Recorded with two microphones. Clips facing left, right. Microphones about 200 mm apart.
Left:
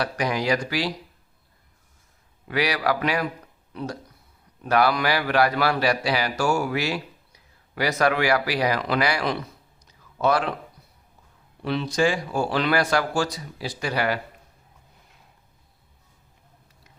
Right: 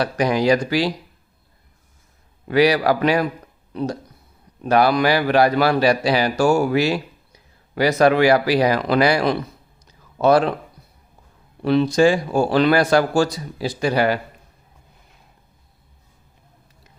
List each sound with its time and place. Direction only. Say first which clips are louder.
0.0 s speech: right 6 dB; 30° right (ahead or behind)
2.5 s speech: right 8 dB; 30° right (ahead or behind)
4.6 s a man's voice: right 5 dB; 25° right (ahead or behind)
11.6 s a man's voice: right 8 dB; 40° right (ahead or behind)